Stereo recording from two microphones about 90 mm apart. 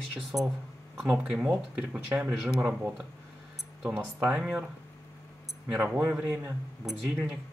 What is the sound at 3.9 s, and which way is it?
Speech, 20° right (ahead or behind).